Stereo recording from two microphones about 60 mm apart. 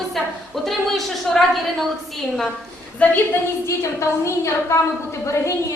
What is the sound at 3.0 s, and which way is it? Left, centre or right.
Speech, left.